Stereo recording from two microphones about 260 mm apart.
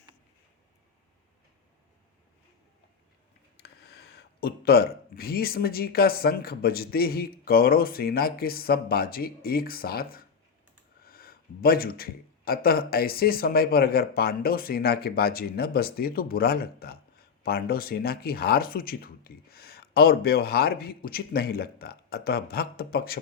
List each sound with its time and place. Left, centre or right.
3.6 s speech: left